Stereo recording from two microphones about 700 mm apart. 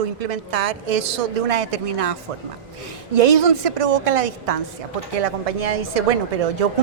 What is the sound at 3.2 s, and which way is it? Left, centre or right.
A woman's voice, right.